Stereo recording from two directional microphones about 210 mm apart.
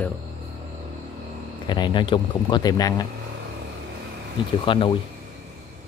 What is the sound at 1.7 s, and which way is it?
Speech, 20° left (ahead or behind).